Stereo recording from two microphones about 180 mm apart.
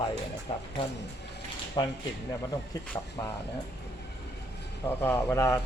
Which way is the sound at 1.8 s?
25° left (ahead or behind).